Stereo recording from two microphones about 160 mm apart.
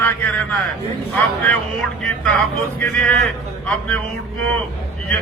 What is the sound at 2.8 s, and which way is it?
Speech, 10° left (ahead or behind).